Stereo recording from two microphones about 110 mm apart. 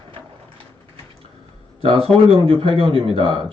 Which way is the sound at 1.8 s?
55° right (ahead or behind).